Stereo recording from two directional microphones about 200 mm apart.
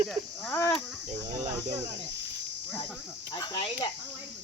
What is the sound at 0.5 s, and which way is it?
Speech, 15° left (ahead or behind).